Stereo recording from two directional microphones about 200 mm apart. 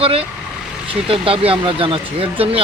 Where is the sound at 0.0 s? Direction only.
30° right (ahead or behind).